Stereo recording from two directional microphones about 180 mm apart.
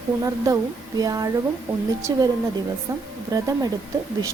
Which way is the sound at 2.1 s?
20° right (ahead or behind).